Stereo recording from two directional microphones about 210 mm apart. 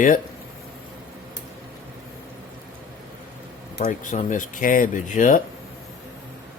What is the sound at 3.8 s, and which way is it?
Speech, 40° left (ahead or behind).